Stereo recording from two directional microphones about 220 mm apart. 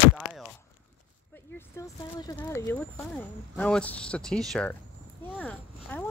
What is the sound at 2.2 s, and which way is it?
Speech, 15° left (ahead or behind).